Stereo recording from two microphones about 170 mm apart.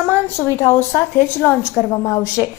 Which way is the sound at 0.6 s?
15° left (ahead or behind).